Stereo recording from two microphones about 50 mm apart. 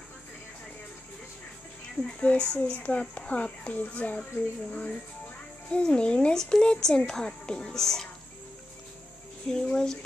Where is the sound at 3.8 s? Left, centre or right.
Left; by 8.1 s centre.